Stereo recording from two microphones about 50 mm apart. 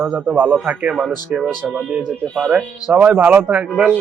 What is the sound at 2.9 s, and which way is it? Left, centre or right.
Speech, right.